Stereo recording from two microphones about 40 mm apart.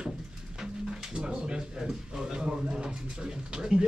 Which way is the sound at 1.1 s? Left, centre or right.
Right.